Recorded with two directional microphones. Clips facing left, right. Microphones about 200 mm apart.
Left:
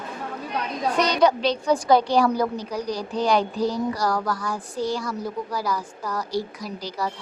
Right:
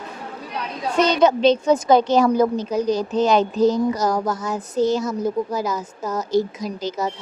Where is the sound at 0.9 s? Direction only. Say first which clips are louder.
Right 4 dB; 25° right (ahead or behind).